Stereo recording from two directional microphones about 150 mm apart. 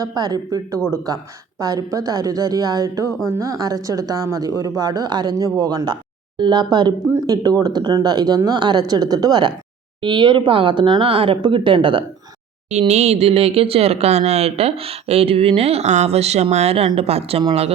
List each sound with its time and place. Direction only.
0.0 s speech: 25° right (ahead or behind)
12.9 s speech: 45° right (ahead or behind)